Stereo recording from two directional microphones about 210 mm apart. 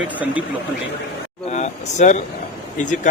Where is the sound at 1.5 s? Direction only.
35° left (ahead or behind).